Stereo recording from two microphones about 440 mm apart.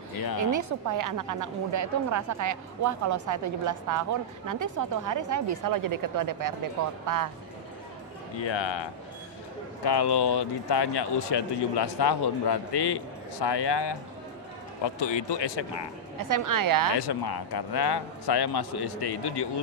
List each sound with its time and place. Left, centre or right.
0.4 s a woman's voice: right
8.4 s speech: left
9.8 s speech: left
15.0 s speech: left
16.2 s a woman's voice: right
17.1 s speech: left